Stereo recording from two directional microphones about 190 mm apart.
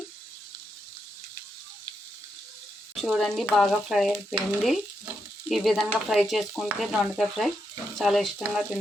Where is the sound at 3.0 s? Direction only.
Centre (ahead or behind).